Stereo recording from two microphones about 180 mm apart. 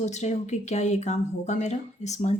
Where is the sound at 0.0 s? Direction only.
40° left (ahead or behind).